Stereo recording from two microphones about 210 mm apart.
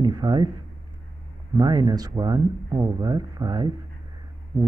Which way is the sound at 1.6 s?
20° right (ahead or behind).